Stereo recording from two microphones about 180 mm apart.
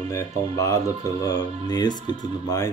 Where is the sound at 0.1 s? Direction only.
15° left (ahead or behind).